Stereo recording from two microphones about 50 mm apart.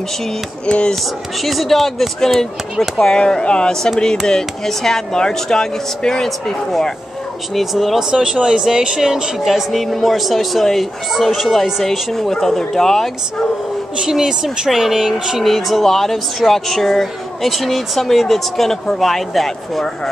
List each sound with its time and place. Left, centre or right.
0.7 s speech: centre
1.4 s speech: centre
8.1 s speech: centre
13.9 s speech: centre